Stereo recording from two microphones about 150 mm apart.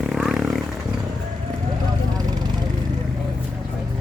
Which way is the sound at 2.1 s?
25° right (ahead or behind).